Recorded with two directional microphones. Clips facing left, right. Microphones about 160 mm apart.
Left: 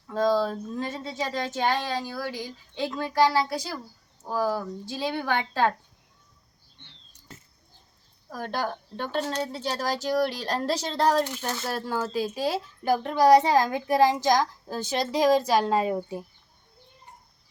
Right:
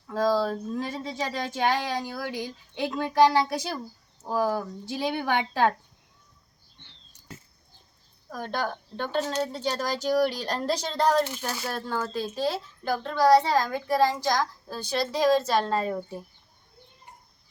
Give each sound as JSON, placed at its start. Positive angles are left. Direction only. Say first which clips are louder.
{"t": 0.1, "sound": "speech", "louder": "left 1 dB", "side_deg": -5}
{"t": 8.3, "sound": "a woman's voice", "louder": "even", "side_deg": 5}